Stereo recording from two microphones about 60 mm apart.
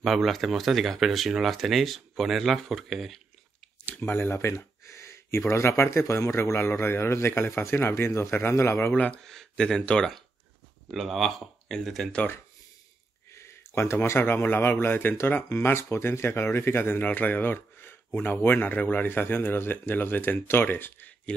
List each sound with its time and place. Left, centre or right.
0.0 s speech: centre
3.8 s a sound: left
5.5 s speech: left
8.9 s speech: left
9.2 s speech: centre
10.9 s speech: centre
13.3 s speech: left